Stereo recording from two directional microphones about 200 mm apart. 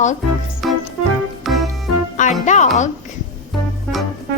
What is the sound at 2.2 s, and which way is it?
Speech, 35° left (ahead or behind).